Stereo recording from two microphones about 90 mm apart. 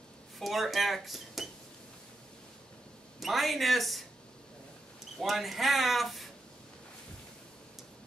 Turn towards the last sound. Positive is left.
turn(degrees=0)  # may be behind; listen again after turning